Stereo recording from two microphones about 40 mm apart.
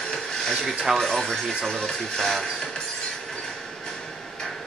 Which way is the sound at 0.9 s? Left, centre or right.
Centre.